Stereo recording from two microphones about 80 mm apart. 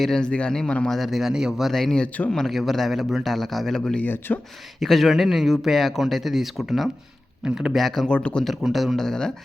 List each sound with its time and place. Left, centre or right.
0.0 s speech: centre
0.9 s speech: centre
1.7 s speech: centre
4.0 s speech: left
4.8 s speech: centre
8.6 s speech: centre